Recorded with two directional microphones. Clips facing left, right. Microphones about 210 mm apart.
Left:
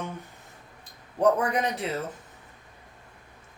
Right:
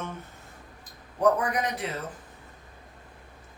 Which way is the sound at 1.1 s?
30° left (ahead or behind).